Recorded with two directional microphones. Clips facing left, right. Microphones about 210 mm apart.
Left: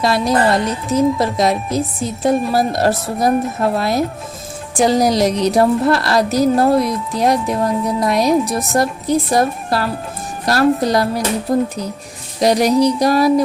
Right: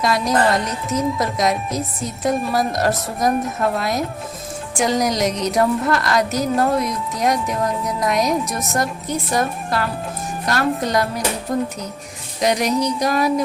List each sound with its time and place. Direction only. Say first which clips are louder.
0.0 s a woman's voice: left 3 dB; 30° left (ahead or behind)